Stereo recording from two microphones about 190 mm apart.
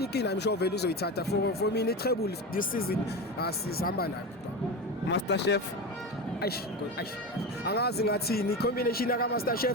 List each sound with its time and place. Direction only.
0.0 s speech: 60° left (ahead or behind)
5.1 s speech: 65° left (ahead or behind)
7.6 s speech: 55° left (ahead or behind)